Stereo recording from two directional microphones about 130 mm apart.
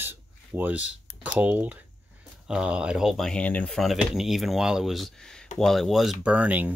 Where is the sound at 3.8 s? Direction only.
Centre (ahead or behind).